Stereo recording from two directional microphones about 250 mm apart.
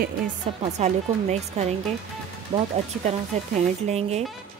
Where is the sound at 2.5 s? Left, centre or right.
Centre.